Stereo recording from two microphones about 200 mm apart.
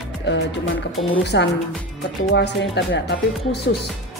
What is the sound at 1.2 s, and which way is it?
Speech, 55° left (ahead or behind).